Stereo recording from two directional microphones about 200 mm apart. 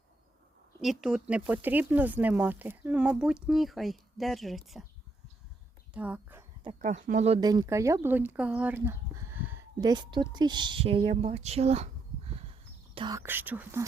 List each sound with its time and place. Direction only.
0.8 s speech: centre (ahead or behind)
5.9 s speech: 5° right (ahead or behind)
6.7 s speech: 35° right (ahead or behind)
7.4 s speech: 15° right (ahead or behind)
12.9 s whispering: 25° right (ahead or behind)
13.1 s speech: 10° right (ahead or behind)